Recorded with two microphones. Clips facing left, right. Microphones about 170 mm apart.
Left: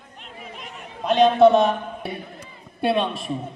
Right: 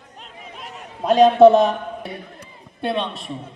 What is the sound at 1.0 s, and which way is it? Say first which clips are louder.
Speech: right 4 dB; 40° right (ahead or behind).